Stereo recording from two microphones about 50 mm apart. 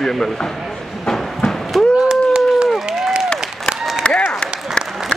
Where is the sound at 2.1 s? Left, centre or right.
Centre.